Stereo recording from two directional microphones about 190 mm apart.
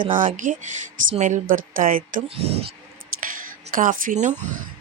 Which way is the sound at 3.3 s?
45° right (ahead or behind).